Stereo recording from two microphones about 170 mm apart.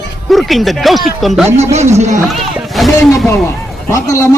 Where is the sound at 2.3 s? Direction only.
Centre (ahead or behind).